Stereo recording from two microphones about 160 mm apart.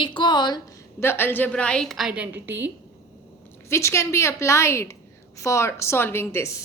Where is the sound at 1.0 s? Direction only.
15° left (ahead or behind); by 2.7 s 10° right (ahead or behind).